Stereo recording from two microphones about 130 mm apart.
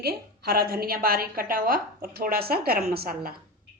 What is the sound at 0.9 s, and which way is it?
Speech, 90° right.